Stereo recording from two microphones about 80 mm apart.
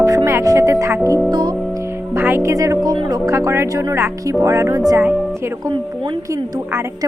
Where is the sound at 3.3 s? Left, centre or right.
Right.